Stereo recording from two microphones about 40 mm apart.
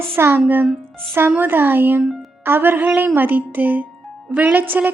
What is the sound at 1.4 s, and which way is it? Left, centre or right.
Speech, right.